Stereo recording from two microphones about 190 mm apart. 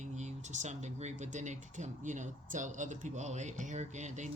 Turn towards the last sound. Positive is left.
turn(degrees=-40)  # may be behind; listen again after turning